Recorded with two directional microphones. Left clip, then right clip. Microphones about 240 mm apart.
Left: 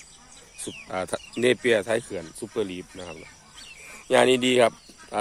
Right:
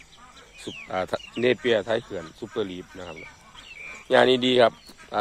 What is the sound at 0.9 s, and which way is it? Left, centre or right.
Speech, centre.